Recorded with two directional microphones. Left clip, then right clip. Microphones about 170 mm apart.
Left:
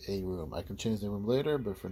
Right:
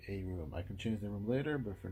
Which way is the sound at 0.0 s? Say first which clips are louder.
Left 8 dB; 40° left (ahead or behind).